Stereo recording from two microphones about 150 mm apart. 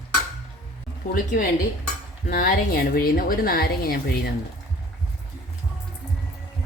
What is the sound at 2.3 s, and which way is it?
A woman's voice, 80° left.